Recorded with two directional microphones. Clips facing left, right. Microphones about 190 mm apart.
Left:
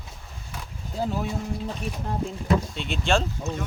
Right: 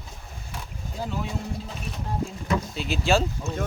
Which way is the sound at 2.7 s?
5° right (ahead or behind).